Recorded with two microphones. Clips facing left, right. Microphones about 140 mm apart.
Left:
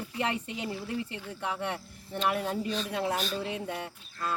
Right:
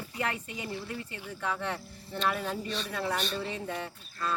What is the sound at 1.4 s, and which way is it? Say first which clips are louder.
Speech: even; 15° left (ahead or behind).